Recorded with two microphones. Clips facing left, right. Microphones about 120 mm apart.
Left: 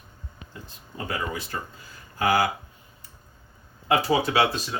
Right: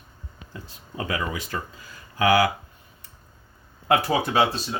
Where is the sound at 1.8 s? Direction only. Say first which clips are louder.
Right 3 dB; 90° right.